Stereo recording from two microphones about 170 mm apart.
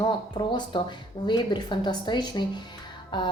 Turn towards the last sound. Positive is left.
turn(degrees=25)  # may be behind; listen again after turning